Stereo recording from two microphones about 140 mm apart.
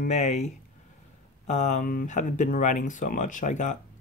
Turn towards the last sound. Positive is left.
turn(degrees=60)  # may be behind; listen again after turning